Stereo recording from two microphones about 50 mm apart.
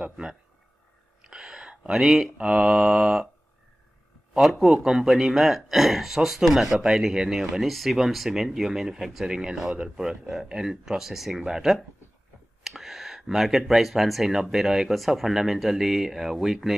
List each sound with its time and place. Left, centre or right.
1.2 s a sound: centre
2.3 s speech: right
4.4 s speech: centre